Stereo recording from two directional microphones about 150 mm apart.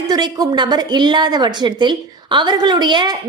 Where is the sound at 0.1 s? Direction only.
25° right (ahead or behind).